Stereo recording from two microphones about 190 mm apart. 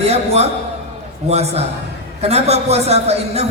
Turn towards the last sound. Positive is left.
turn(degrees=-35)  # may be behind; listen again after turning